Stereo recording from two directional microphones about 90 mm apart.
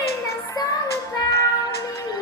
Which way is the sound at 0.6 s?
40° left (ahead or behind).